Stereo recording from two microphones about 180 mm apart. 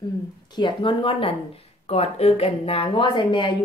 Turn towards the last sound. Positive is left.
turn(degrees=25)  # may be behind; listen again after turning